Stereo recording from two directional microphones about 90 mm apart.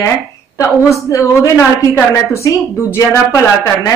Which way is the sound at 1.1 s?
35° left (ahead or behind).